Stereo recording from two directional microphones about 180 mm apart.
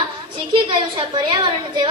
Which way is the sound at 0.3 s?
30° right (ahead or behind).